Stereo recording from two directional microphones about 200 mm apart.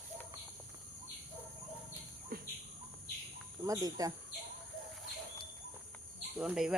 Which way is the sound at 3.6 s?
15° right (ahead or behind).